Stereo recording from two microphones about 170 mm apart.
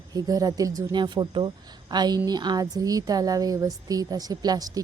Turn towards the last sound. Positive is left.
turn(degrees=-20)  # may be behind; listen again after turning